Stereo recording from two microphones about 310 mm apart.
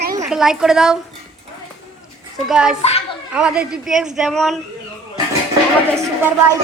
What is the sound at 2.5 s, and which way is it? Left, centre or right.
Speech, centre.